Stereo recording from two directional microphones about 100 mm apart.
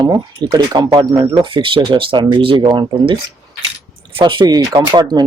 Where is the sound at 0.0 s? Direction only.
40° right (ahead or behind).